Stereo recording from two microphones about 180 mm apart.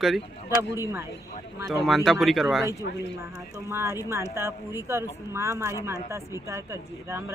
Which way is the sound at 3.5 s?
15° right (ahead or behind).